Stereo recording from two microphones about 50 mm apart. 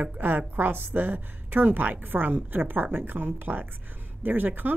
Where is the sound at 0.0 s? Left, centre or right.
Right.